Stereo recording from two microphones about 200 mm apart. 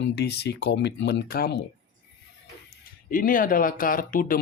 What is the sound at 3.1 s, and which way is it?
Speech, 45° left (ahead or behind).